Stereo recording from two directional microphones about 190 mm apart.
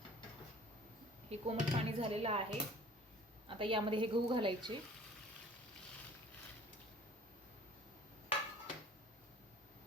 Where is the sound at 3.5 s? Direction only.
25° right (ahead or behind).